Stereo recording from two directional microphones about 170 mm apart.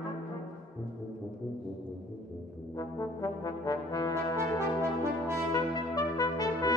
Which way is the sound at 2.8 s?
20° left (ahead or behind).